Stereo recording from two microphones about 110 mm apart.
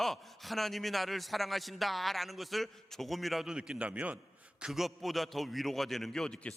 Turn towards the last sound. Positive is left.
turn(degrees=5)  # may be behind; listen again after turning